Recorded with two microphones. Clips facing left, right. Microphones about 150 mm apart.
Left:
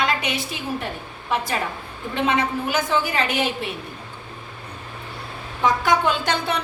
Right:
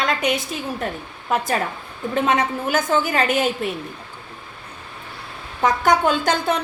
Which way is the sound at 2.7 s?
45° right (ahead or behind).